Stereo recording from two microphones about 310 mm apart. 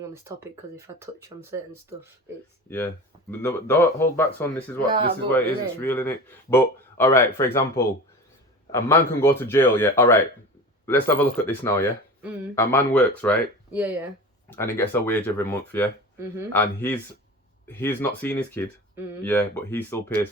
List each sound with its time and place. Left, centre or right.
0.0 s speech: centre
2.6 s speech: centre
4.9 s speech: centre
5.3 s speech: centre
14.5 s speech: centre